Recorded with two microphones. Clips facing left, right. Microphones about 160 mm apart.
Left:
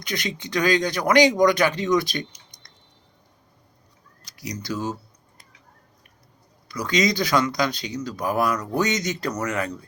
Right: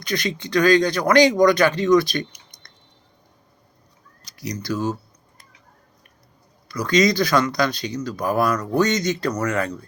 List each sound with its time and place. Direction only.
0.0 s speech: 15° left (ahead or behind)
4.4 s speech: 15° left (ahead or behind)
6.7 s speech: 20° left (ahead or behind)